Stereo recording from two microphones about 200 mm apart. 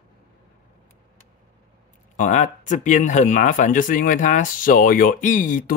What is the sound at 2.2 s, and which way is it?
Speech, 40° left (ahead or behind).